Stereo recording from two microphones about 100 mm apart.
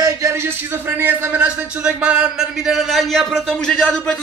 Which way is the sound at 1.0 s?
10° right (ahead or behind).